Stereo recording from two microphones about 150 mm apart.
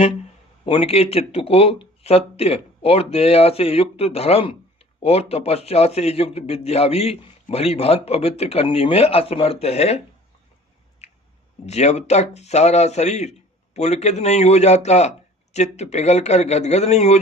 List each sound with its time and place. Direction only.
0.6 s speech: 35° left (ahead or behind)
11.0 s a sound: 45° left (ahead or behind)
11.6 s a man's voice: 45° left (ahead or behind)